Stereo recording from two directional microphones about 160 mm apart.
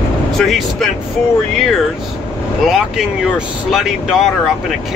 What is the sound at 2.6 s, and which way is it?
Speech, 5° right (ahead or behind).